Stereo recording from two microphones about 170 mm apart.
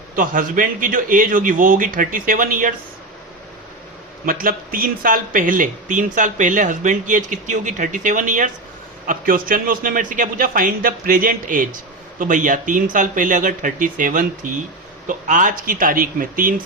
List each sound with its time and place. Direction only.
0.2 s speech: 55° right (ahead or behind)
4.3 s speech: 55° right (ahead or behind)